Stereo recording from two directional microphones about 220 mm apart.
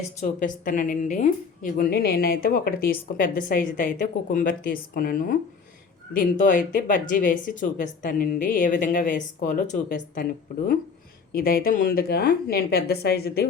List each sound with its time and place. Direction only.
0.2 s a woman's voice: 35° left (ahead or behind)
11.3 s a woman's voice: 40° left (ahead or behind)